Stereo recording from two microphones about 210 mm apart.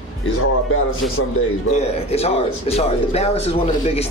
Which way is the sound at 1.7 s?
30° left (ahead or behind).